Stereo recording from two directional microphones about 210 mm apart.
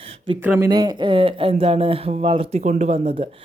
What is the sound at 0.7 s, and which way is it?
Speech, 20° right (ahead or behind).